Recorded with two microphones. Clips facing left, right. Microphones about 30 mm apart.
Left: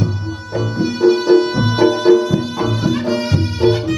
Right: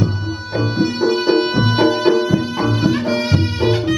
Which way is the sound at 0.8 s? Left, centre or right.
Right.